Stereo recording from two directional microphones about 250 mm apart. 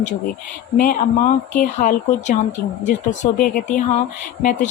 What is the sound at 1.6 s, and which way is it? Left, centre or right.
Speech, left.